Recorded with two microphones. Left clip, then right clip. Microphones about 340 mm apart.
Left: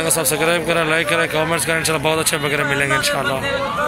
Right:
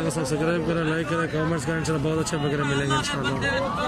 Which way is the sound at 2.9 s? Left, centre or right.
Centre.